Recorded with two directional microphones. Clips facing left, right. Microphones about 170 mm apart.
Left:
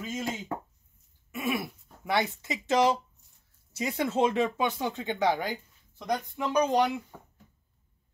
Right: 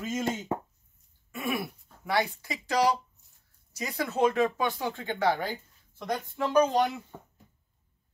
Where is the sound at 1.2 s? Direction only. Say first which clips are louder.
Left 1 dB; 20° left (ahead or behind).